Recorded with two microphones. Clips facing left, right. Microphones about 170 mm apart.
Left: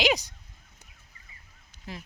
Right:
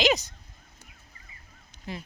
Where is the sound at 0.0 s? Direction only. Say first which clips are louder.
Right 1 dB; 10° left (ahead or behind).